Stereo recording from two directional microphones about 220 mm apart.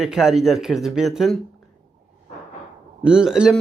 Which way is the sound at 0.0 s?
Centre (ahead or behind).